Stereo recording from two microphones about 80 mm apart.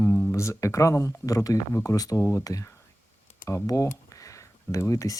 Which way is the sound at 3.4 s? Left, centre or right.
Left.